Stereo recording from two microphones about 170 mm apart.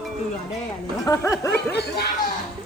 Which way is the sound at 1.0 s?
20° left (ahead or behind).